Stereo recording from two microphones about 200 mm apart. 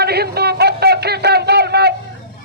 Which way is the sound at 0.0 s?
55° right (ahead or behind).